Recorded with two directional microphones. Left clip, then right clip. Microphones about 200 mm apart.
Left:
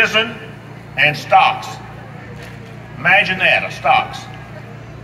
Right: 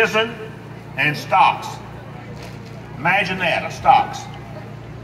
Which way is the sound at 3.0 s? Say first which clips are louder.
Left 6 dB; 40° left (ahead or behind).